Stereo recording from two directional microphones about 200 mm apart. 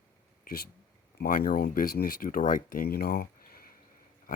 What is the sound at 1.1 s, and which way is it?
Speech, 50° left (ahead or behind).